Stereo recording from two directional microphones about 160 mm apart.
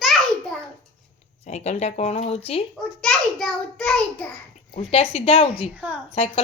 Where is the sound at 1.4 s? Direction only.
45° left (ahead or behind).